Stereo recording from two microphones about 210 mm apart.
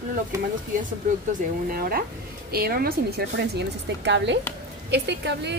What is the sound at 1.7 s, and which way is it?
A woman's voice, 45° right (ahead or behind).